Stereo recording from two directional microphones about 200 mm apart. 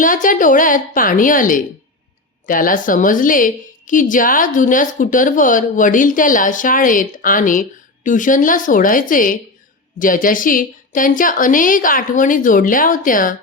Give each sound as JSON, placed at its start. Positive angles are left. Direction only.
{"t": 0.0, "sound": "a woman's voice", "side_deg": 40}